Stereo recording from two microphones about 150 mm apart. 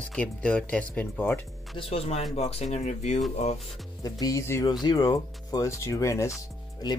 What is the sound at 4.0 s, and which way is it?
Speech, 25° left (ahead or behind).